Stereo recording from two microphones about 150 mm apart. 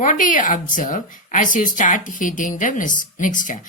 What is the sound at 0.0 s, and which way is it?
A woman's voice, 60° left (ahead or behind).